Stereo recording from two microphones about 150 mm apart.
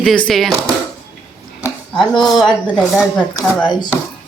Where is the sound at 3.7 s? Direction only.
30° left (ahead or behind).